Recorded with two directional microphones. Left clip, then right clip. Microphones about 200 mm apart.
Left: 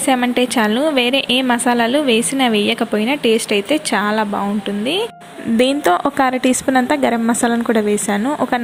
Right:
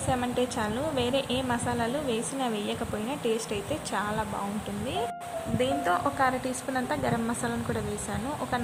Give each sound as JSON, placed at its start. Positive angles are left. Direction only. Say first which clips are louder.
{"t": 0.1, "sound": "a woman's voice", "louder": "left 13 dB", "side_deg": 20}
{"t": 5.5, "sound": "a woman's voice", "louder": "left 12 dB", "side_deg": 35}